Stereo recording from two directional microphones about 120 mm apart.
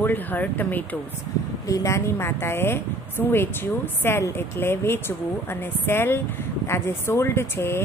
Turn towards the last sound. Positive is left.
turn(degrees=20)  # may be behind; listen again after turning